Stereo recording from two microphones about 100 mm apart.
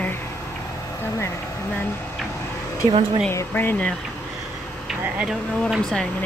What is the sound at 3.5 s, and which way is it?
Speech, 20° left (ahead or behind).